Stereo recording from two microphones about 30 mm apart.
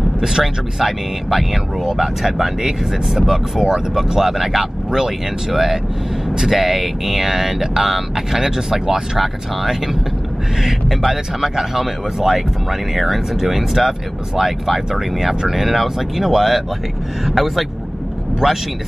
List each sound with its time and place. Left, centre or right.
0.4 s speech: centre
3.6 s speech: centre
9.2 s speech: centre
18.4 s speech: centre